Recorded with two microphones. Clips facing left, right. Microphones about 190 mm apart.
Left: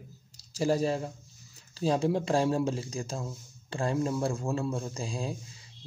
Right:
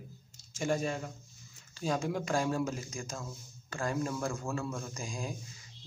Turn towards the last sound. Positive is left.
turn(degrees=30)  # may be behind; listen again after turning